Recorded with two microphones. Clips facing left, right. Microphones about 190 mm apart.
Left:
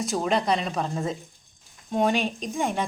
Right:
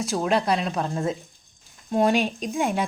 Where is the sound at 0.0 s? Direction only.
Centre (ahead or behind).